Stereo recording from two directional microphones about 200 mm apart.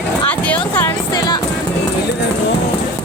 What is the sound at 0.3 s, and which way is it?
Speech, 5° left (ahead or behind).